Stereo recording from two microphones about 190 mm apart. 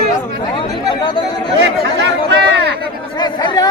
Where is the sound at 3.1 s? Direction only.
25° left (ahead or behind).